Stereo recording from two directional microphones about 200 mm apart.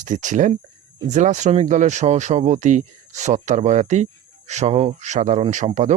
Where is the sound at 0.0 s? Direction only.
40° right (ahead or behind).